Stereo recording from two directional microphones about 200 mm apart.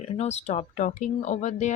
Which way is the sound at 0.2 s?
35° left (ahead or behind).